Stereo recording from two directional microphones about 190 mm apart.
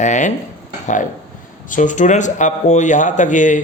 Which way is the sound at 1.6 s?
40° left (ahead or behind).